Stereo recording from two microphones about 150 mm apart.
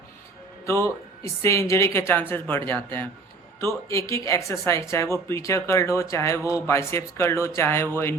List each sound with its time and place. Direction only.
0.6 s speech: 20° left (ahead or behind)